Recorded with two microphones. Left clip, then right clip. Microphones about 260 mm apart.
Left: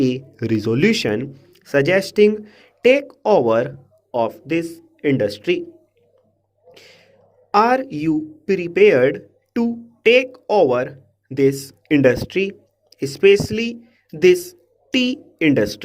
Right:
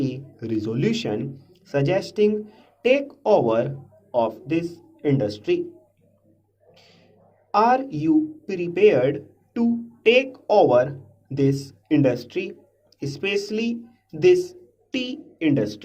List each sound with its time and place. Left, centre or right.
0.0 s a man's voice: left
6.7 s a sound: left
7.5 s speech: left